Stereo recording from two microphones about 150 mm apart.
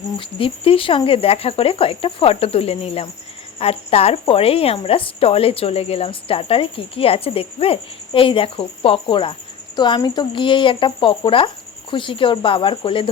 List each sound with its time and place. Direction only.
0.2 s a woman's voice: 35° left (ahead or behind)